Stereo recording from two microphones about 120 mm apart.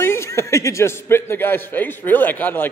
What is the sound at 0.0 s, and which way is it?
A man's voice, 20° left (ahead or behind).